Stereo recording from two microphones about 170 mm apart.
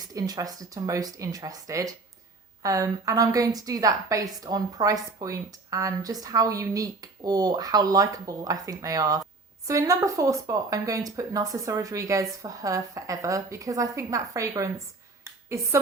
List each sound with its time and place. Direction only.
0.0 s a woman's voice: 20° right (ahead or behind)